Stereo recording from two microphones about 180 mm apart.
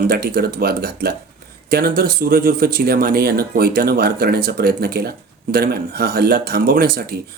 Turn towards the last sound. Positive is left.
turn(degrees=-60)  # may be behind; listen again after turning